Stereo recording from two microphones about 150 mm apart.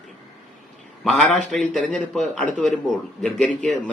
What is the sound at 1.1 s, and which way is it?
A man's voice, 5° left (ahead or behind).